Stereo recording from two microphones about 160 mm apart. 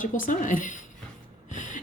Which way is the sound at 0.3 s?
55° left (ahead or behind).